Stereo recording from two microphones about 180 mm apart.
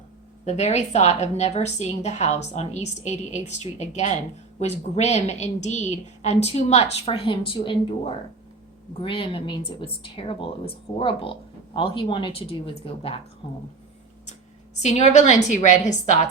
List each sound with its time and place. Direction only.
0.4 s a woman's voice: 40° left (ahead or behind)
14.8 s a woman's voice: 40° left (ahead or behind)